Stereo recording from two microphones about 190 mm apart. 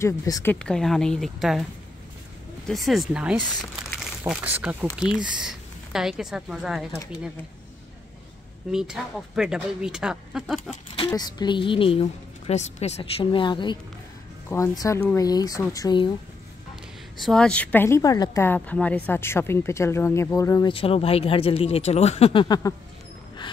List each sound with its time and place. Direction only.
0.0 s speech: 15° left (ahead or behind); by 1.7 s centre (ahead or behind)
2.7 s speech: centre (ahead or behind)
8.7 s speech: centre (ahead or behind)
11.1 s a woman's voice: 20° left (ahead or behind)
17.2 s speech: 5° left (ahead or behind); by 22.8 s 20° left (ahead or behind)